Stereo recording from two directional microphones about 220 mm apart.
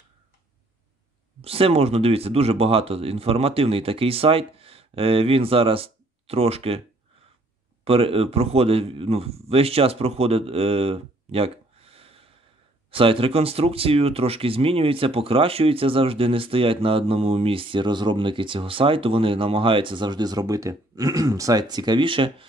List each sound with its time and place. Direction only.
1.4 s speech: 25° right (ahead or behind)
7.8 s a man's voice: 25° right (ahead or behind)